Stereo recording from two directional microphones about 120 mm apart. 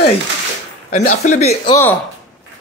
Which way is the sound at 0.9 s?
80° left.